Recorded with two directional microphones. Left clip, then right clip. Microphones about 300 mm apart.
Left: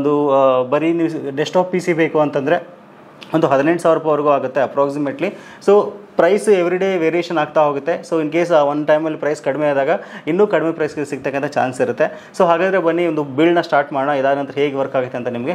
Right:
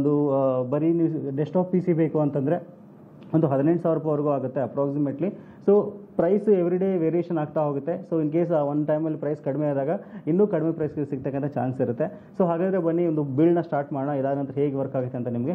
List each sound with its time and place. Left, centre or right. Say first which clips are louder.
0.3 s speech: left 10 dB; centre